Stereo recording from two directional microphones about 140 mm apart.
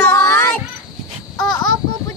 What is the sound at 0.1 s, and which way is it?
Child singing, 20° left (ahead or behind).